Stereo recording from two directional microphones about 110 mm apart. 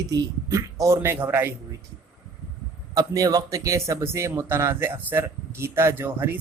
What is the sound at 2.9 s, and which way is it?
Speech, 35° right (ahead or behind).